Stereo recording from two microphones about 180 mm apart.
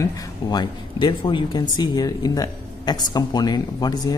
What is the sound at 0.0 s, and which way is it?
Speech, 25° left (ahead or behind).